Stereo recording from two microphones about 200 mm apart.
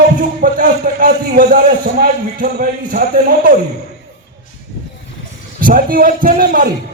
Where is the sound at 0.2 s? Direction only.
45° right (ahead or behind).